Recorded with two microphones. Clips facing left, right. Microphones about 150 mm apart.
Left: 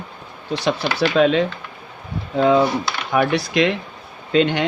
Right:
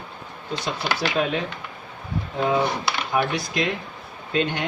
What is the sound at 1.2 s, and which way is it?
Speech, 90° left.